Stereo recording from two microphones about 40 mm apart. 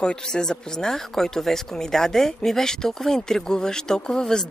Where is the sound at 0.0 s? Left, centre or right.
Centre.